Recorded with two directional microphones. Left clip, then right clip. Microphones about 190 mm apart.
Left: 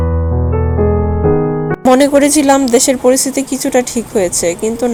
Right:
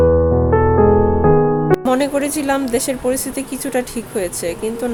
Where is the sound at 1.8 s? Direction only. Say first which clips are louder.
Left 8 dB; 25° left (ahead or behind).